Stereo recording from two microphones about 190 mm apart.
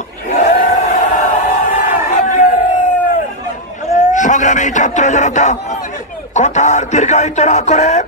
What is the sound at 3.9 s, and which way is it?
A man's voice, 40° left (ahead or behind).